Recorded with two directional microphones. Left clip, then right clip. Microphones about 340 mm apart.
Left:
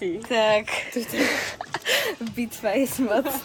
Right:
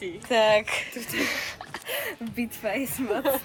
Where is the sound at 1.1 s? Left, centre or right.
Left.